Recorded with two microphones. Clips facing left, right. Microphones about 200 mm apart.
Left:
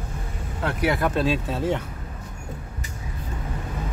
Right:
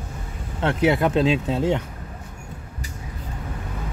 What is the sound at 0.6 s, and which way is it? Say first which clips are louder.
Speech: right 4 dB; 25° right (ahead or behind).